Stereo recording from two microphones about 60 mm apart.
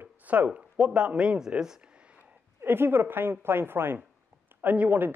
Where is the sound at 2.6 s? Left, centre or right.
Right.